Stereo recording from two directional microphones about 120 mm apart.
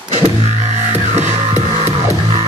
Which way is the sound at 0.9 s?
70° right (ahead or behind).